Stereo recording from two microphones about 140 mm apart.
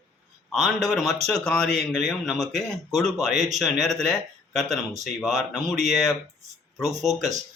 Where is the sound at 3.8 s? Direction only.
Centre (ahead or behind).